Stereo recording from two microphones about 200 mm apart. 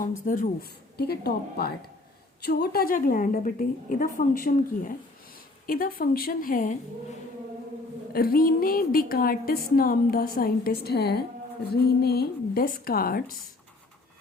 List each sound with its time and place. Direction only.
0.0 s a woman's voice: 40° left (ahead or behind)
8.1 s a woman's voice: 50° left (ahead or behind)